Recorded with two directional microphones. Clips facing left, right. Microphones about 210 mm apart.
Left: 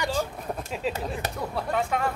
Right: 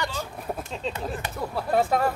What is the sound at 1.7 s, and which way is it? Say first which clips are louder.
Speech: right 5 dB; 35° right (ahead or behind).